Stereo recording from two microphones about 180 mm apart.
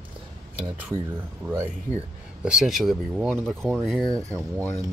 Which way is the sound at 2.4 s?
Centre (ahead or behind).